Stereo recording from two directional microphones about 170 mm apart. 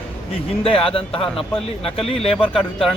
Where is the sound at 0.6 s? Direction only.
35° left (ahead or behind).